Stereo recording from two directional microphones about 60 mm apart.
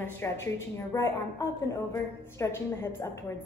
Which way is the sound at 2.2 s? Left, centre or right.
Left.